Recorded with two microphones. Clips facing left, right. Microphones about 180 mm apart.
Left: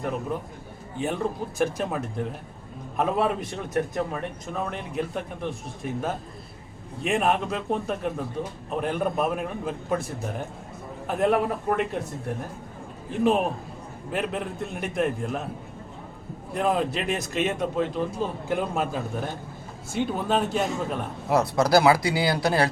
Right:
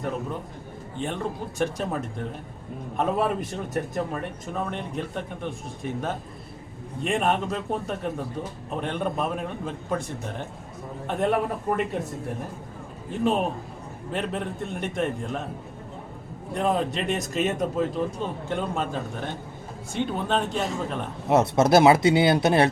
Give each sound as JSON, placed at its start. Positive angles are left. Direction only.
{"t": 0.9, "sound": "speech", "side_deg": 5}
{"t": 14.1, "sound": "speech", "side_deg": 5}
{"t": 16.6, "sound": "speech", "side_deg": 5}
{"t": 21.2, "sound": "speech", "side_deg": -25}